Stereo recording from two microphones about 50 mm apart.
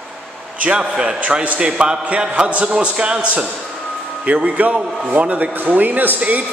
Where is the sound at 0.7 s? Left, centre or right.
Centre.